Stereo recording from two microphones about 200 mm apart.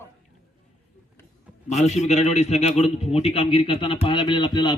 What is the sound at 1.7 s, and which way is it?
A man's voice, 35° left (ahead or behind).